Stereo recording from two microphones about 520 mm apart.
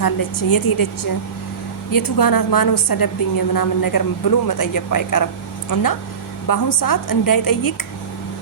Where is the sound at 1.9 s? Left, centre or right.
Left.